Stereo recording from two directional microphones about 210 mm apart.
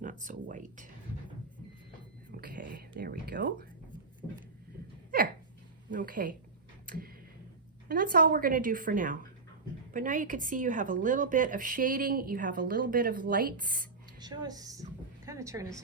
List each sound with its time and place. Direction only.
0.0 s a woman's voice: 40° right (ahead or behind)
2.3 s speech: 45° right (ahead or behind)
6.0 s a woman's voice: 40° right (ahead or behind)
6.8 s tick-tock: 45° right (ahead or behind)
7.9 s a woman's voice: 45° right (ahead or behind)
14.2 s a woman's voice: 20° right (ahead or behind)